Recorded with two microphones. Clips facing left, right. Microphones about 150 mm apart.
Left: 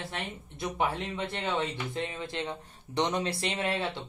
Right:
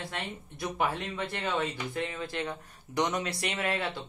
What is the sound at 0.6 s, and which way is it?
Speech, 20° left (ahead or behind).